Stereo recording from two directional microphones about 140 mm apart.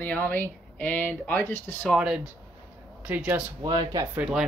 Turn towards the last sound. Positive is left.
turn(degrees=-10)  # may be behind; listen again after turning